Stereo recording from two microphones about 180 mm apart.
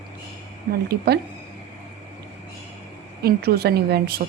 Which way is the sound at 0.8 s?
60° right (ahead or behind).